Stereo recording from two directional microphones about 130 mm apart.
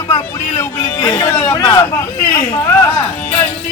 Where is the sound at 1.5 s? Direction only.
25° left (ahead or behind).